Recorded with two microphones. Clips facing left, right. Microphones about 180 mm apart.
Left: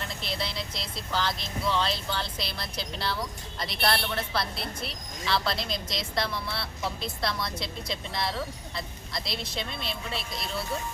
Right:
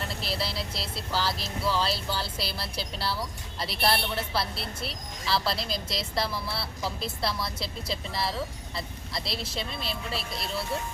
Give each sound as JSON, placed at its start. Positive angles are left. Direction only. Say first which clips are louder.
{"t": 0.2, "sound": "speech", "louder": "right 1 dB", "side_deg": -5}